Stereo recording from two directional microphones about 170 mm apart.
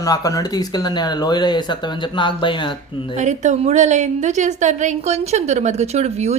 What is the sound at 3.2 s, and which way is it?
A woman's voice, 45° right (ahead or behind).